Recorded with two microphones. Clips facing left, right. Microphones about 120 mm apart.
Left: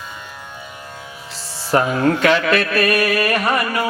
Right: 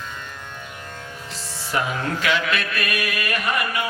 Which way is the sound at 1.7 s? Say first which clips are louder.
Left 9 dB; 40° left (ahead or behind).